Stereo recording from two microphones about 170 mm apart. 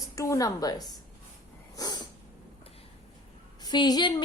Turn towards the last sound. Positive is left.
turn(degrees=25)  # may be behind; listen again after turning